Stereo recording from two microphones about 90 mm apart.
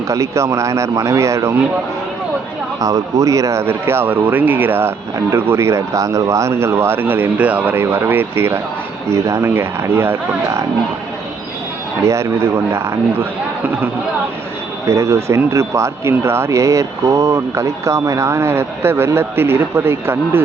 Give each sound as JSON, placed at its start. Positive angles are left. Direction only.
{"t": 0.1, "sound": "speech", "side_deg": -35}
{"t": 2.8, "sound": "speech", "side_deg": -40}
{"t": 12.0, "sound": "speech", "side_deg": -30}
{"t": 14.8, "sound": "speech", "side_deg": -30}